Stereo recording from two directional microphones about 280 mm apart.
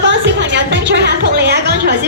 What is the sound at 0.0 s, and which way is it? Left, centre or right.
Music, right.